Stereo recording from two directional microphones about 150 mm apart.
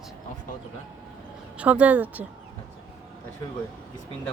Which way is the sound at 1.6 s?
10° right (ahead or behind).